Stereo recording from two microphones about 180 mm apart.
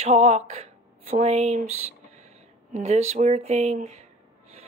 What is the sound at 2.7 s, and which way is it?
Speech, 40° right (ahead or behind).